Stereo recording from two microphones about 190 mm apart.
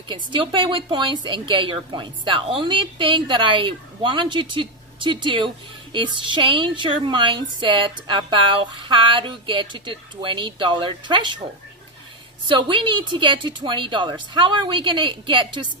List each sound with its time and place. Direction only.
0.1 s a woman's voice: 25° right (ahead or behind)
12.4 s a woman's voice: 25° right (ahead or behind)